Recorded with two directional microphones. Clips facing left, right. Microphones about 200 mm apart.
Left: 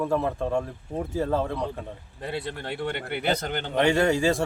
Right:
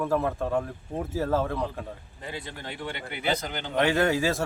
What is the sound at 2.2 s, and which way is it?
Speech, 65° left (ahead or behind).